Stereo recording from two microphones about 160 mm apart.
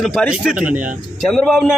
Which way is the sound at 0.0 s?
Centre (ahead or behind).